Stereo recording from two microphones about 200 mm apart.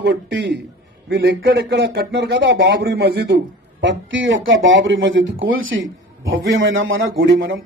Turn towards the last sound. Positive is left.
turn(degrees=-70)  # may be behind; listen again after turning